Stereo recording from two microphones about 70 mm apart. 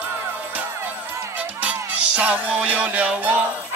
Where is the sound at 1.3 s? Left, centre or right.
Right.